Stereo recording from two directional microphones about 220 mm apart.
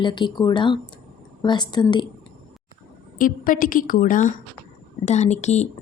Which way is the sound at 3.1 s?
40° left (ahead or behind).